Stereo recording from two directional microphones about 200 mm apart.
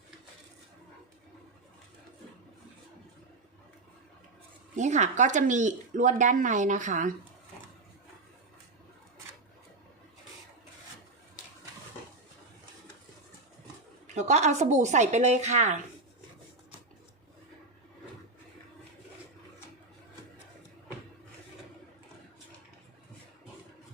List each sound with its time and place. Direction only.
4.8 s speech: 35° right (ahead or behind)
14.2 s speech: 35° right (ahead or behind)